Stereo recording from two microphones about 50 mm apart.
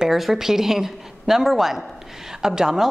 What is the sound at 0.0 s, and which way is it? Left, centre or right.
A woman's voice, centre.